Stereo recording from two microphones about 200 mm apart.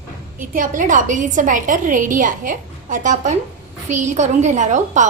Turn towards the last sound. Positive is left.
turn(degrees=-35)  # may be behind; listen again after turning